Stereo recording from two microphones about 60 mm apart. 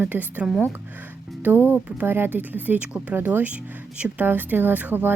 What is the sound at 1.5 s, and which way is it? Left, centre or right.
A woman's voice, right.